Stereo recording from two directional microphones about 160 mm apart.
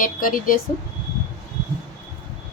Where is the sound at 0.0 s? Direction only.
60° left (ahead or behind).